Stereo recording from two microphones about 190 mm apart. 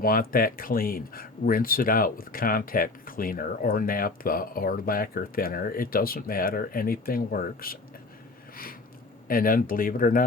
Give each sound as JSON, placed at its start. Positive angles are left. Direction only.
{"t": 0.0, "sound": "speech", "side_deg": 50}
{"t": 9.2, "sound": "speech", "side_deg": 50}